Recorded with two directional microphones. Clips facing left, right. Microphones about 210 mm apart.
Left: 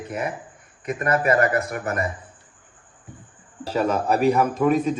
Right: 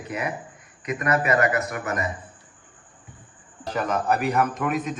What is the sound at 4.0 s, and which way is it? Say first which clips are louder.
Speech: left 3 dB; 30° left (ahead or behind).